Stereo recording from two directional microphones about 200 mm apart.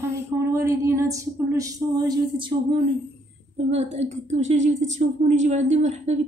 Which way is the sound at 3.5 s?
30° right (ahead or behind).